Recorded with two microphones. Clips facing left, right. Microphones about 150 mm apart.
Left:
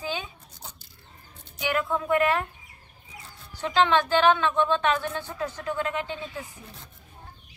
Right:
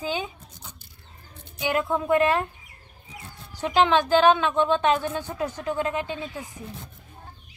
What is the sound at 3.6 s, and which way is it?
Speech, 15° right (ahead or behind).